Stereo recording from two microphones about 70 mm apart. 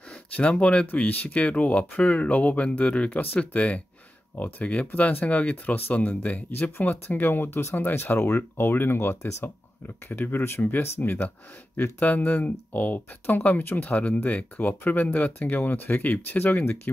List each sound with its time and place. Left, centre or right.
0.4 s speech: centre